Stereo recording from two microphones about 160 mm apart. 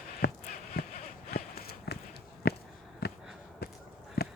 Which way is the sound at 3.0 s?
80° left.